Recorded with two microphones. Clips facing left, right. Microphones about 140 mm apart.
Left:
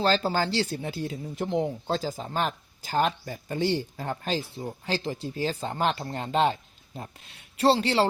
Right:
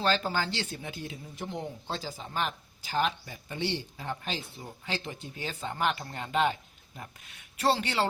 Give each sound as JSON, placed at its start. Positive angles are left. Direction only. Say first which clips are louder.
{"t": 0.0, "sound": "speech", "louder": "left 4 dB", "side_deg": 35}
{"t": 4.5, "sound": "speech", "louder": "left 6 dB", "side_deg": 30}